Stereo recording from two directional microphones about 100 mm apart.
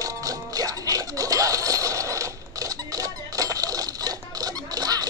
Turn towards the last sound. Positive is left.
turn(degrees=-40)  # may be behind; listen again after turning